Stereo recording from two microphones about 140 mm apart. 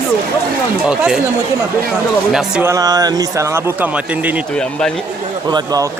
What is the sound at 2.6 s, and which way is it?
A man's voice, 25° right (ahead or behind).